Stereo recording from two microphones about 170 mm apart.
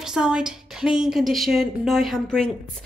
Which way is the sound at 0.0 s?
5° right (ahead or behind).